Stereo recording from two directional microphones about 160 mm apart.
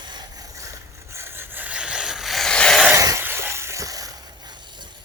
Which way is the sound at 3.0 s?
20° right (ahead or behind).